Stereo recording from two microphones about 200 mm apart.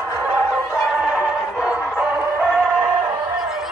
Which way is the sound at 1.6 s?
5° right (ahead or behind).